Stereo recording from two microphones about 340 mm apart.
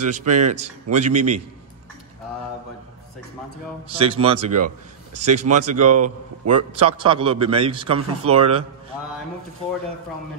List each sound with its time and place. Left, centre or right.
0.0 s a man's voice: right
1.1 s a man's voice: right
4.0 s a man's voice: centre
4.4 s a man's voice: right
6.9 s a man's voice: centre